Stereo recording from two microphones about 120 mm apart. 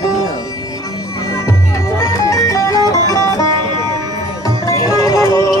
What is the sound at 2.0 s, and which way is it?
Music, 30° left (ahead or behind).